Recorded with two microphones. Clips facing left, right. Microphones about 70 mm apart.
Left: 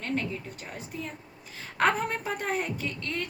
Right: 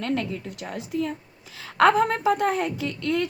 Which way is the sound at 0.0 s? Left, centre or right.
Right.